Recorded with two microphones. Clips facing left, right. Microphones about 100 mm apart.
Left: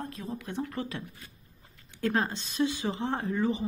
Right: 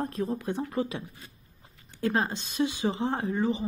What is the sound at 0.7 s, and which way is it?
Speech, 15° right (ahead or behind).